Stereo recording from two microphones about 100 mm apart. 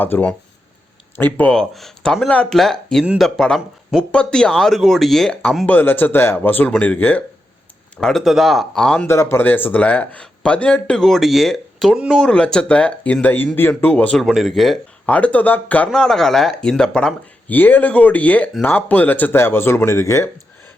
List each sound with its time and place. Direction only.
0.0 s speech: 15° left (ahead or behind)
1.5 s speech: 5° left (ahead or behind)
5.6 s speech: 20° left (ahead or behind)
7.9 s speech: centre (ahead or behind)
9.0 s speech: 25° left (ahead or behind)
14.2 s speech: centre (ahead or behind)
15.0 s speech: 15° left (ahead or behind)